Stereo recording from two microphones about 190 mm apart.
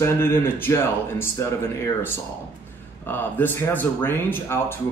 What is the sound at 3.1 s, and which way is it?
A man's voice, 10° left (ahead or behind).